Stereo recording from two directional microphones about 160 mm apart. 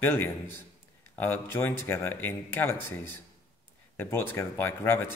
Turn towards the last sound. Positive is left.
turn(degrees=15)  # may be behind; listen again after turning